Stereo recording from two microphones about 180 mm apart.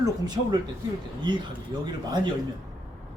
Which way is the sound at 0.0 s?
20° right (ahead or behind).